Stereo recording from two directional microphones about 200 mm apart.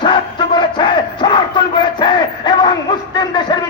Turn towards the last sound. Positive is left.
turn(degrees=20)  # may be behind; listen again after turning